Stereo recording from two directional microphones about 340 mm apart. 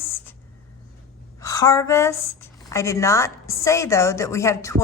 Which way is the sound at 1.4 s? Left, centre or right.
Centre.